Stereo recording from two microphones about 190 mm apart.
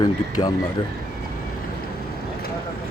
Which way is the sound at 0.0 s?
20° left (ahead or behind).